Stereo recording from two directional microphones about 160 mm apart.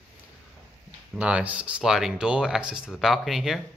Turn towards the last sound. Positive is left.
turn(degrees=0)  # may be behind; listen again after turning